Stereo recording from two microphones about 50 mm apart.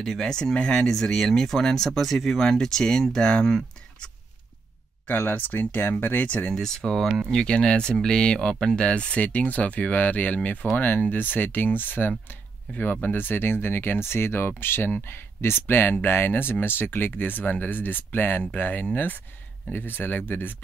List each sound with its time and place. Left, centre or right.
0.0 s speech: centre
0.3 s speech: centre
2.4 s speech: centre
5.0 s speech: left
6.2 s speech: left
6.5 s speech: centre; by 18.9 s left
19.7 s speech: left